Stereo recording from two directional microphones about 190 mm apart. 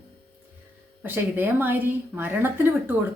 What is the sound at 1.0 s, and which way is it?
A woman's voice, 10° right (ahead or behind).